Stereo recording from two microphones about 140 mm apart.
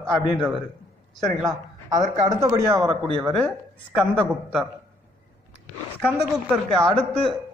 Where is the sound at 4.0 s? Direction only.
5° right (ahead or behind).